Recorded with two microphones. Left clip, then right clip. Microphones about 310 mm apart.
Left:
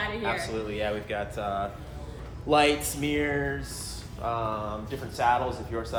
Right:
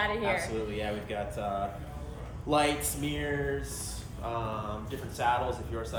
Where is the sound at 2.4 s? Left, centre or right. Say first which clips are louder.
Left 5 dB; centre.